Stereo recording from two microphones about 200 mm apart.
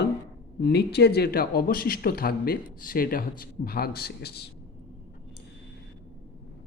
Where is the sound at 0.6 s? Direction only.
55° left (ahead or behind).